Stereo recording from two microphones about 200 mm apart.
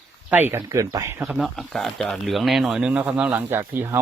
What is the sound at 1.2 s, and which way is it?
Speech, centre (ahead or behind).